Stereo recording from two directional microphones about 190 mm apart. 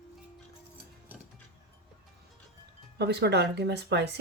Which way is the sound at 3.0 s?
60° right (ahead or behind).